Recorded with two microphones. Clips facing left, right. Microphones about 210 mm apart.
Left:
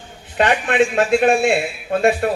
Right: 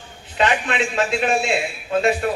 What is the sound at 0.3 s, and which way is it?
Speech, 50° left (ahead or behind).